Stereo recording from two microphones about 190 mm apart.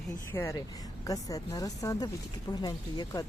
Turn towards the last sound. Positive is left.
turn(degrees=20)  # may be behind; listen again after turning